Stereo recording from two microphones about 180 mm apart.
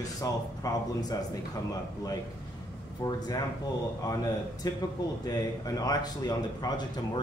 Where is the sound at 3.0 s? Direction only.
20° left (ahead or behind).